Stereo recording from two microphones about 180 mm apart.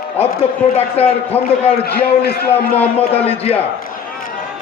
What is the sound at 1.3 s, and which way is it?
Speech, 10° left (ahead or behind).